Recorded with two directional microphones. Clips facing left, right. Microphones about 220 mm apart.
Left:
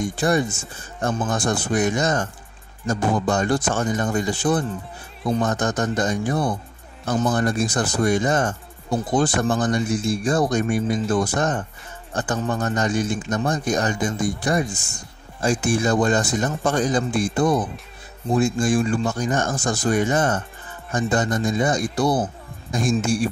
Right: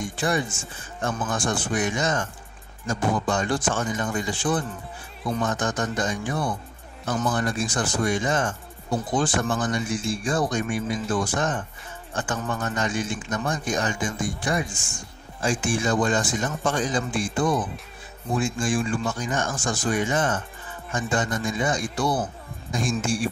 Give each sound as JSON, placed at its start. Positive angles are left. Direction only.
{"t": 0.0, "sound": "speech", "side_deg": 40}